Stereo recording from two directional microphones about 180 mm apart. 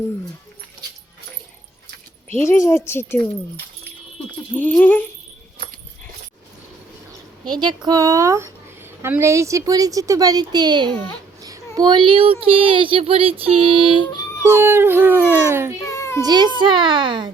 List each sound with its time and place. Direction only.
2.6 s speech: 15° left (ahead or behind)
4.5 s speech: 10° left (ahead or behind)
7.4 s speech: 25° right (ahead or behind)
14.0 s speech: 25° left (ahead or behind)
14.4 s speech: 15° right (ahead or behind)
15.8 s a sound: 15° left (ahead or behind)
16.2 s speech: 25° right (ahead or behind)